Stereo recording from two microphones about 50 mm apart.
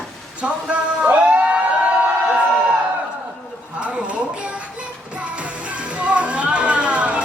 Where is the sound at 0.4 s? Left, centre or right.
Right.